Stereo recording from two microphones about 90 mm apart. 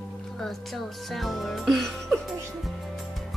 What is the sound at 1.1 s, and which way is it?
Speech, centre (ahead or behind).